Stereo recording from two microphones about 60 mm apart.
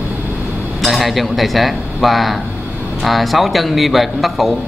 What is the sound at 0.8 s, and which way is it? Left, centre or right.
A man's voice, centre.